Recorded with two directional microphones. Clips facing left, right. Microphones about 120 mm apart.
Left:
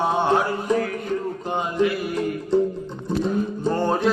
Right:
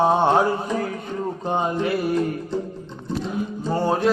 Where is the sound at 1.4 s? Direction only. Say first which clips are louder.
Even; 30° right (ahead or behind).